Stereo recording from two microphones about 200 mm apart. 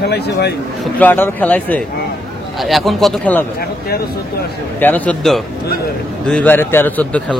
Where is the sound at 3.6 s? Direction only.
50° left (ahead or behind).